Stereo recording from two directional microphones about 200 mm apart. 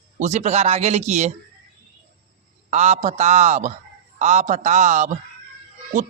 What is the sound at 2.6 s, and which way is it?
Speech, 35° right (ahead or behind).